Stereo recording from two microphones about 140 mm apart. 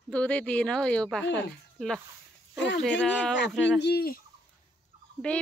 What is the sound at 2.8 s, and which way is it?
Speech, 5° left (ahead or behind).